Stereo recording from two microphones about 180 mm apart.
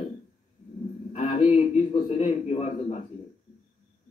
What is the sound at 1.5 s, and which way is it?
A man's voice, 40° left (ahead or behind).